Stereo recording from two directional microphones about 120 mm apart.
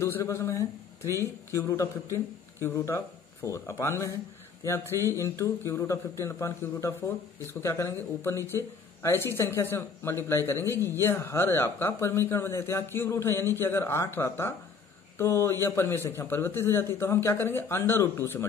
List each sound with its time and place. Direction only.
0.0 s a man's voice: 25° left (ahead or behind)